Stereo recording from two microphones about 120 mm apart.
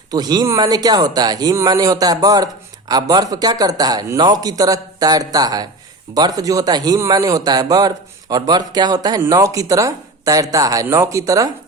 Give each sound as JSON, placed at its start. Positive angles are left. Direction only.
{"t": 0.1, "sound": "a man's voice", "side_deg": -35}